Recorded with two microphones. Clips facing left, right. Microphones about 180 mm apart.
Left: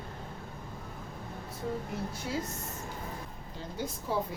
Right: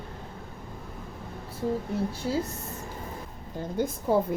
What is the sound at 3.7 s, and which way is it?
Speech, 50° right (ahead or behind).